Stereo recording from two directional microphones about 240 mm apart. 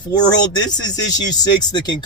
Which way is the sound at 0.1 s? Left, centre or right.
Centre.